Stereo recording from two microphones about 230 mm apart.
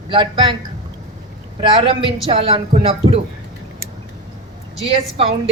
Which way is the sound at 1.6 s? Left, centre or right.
Right.